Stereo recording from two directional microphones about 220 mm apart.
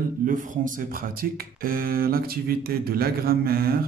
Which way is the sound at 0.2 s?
40° right (ahead or behind).